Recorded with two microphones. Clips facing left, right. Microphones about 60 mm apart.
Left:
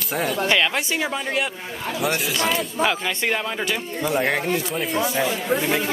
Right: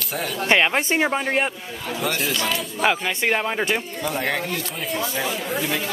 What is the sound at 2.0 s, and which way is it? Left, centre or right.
Speech, centre.